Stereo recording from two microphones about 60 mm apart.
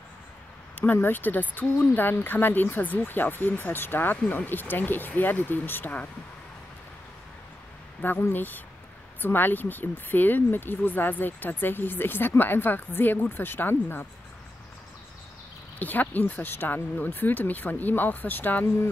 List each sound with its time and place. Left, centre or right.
0.9 s speech: left
8.0 s speech: left
15.8 s speech: left